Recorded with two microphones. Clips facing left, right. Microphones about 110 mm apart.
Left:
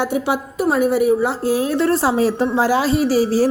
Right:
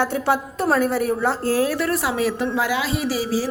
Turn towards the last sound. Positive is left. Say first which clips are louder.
# left 7 dB
turn(degrees=40)  # may be behind; listen again after turning